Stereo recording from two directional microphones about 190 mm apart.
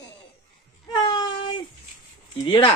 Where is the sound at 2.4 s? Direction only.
25° left (ahead or behind).